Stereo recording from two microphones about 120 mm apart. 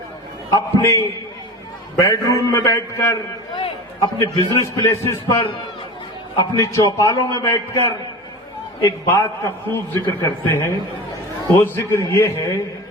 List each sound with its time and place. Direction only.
0.5 s a man's voice: 25° left (ahead or behind)
3.5 s a man's voice: 40° left (ahead or behind)
8.8 s a man's voice: 20° left (ahead or behind)